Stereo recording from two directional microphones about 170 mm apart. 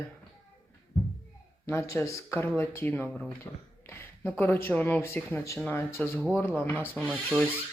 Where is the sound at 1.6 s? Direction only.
15° left (ahead or behind).